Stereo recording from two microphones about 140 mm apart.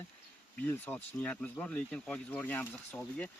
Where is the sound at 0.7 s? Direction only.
10° left (ahead or behind).